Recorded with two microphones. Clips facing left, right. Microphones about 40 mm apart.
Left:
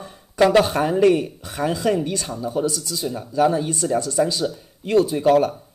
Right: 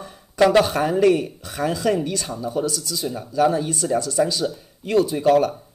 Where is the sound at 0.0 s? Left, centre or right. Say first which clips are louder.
Even; centre.